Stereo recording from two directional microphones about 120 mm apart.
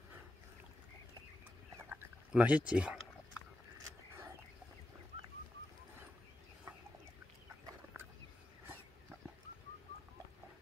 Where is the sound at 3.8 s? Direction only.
25° right (ahead or behind).